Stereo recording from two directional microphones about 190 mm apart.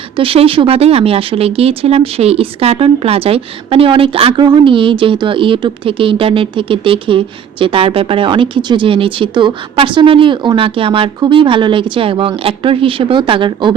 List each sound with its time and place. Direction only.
0.2 s speech: 30° right (ahead or behind)